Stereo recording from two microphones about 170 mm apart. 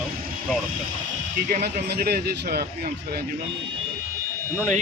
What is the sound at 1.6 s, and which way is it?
A man's voice, 70° right (ahead or behind).